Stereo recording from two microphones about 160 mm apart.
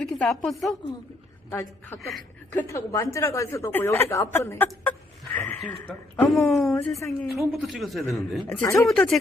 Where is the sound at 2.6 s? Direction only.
20° left (ahead or behind).